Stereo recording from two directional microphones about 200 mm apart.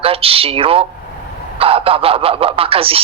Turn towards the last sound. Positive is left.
turn(degrees=-30)  # may be behind; listen again after turning